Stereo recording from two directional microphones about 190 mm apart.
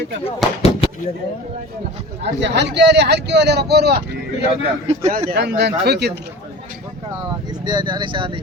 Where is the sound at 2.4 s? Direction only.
65° right (ahead or behind).